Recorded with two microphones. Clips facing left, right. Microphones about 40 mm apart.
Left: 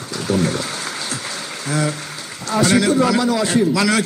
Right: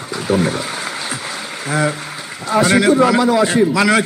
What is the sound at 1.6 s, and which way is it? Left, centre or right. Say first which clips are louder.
A man's voice: right 3 dB; centre.